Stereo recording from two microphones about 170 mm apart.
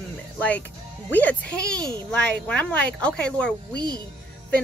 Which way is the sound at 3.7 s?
25° right (ahead or behind).